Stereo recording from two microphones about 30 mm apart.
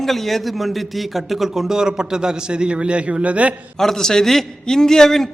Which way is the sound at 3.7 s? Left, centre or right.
Centre.